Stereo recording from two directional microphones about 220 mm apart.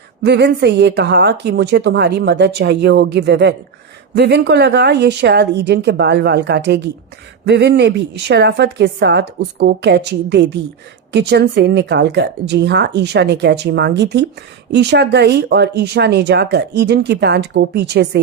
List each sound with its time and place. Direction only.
0.2 s speech: 50° right (ahead or behind)